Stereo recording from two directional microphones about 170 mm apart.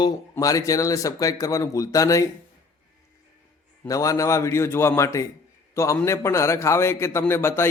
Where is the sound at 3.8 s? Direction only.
20° left (ahead or behind).